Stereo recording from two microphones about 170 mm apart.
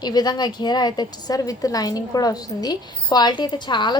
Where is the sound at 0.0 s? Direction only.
25° left (ahead or behind).